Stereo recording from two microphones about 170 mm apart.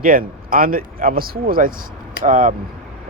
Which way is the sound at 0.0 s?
55° right (ahead or behind).